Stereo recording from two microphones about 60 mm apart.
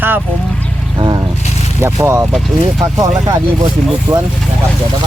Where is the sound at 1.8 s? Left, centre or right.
Right.